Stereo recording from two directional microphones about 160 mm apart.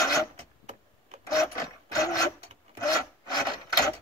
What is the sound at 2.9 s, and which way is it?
Wood, 25° left (ahead or behind).